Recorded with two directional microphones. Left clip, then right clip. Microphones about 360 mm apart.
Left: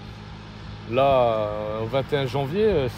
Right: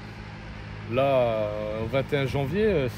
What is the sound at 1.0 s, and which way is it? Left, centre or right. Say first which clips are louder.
Speech: left 4 dB; centre.